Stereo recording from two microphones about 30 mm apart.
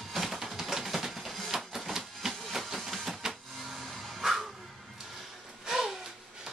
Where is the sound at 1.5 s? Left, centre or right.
Centre.